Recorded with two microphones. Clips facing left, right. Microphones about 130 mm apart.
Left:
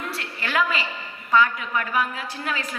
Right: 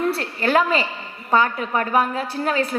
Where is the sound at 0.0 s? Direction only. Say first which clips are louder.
Right 10 dB; 40° right (ahead or behind).